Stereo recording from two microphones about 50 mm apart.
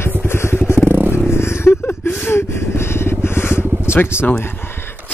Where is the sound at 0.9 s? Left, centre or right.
Right.